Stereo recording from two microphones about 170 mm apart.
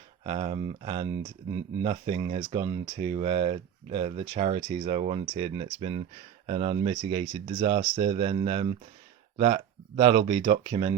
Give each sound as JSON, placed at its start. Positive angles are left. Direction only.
{"t": 0.3, "sound": "speech", "side_deg": -35}